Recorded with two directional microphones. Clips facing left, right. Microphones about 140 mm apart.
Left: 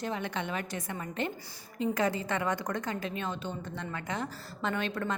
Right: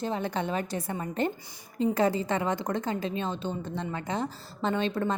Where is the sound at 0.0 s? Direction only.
35° right (ahead or behind).